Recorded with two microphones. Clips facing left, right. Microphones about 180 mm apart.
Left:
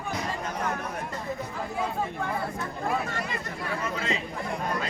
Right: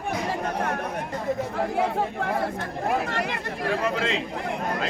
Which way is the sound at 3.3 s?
80° right.